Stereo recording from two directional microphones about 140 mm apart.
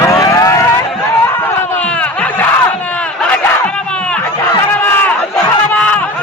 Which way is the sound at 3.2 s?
10° left (ahead or behind).